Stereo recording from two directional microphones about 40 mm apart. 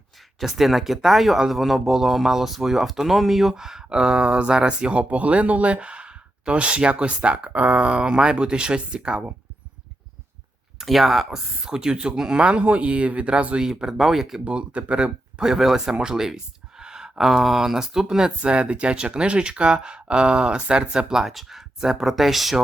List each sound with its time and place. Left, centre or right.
0.4 s speech: centre; by 7.5 s right
7.5 s speech: right
7.9 s speech: right
10.8 s speech: centre
12.4 s speech: right
13.7 s speech: centre
14.4 s speech: right
15.4 s speech: centre